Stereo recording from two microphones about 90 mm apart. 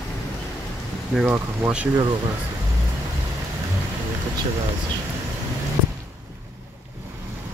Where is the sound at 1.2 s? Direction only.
25° right (ahead or behind).